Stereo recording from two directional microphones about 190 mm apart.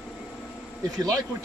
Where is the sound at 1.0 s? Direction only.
20° right (ahead or behind).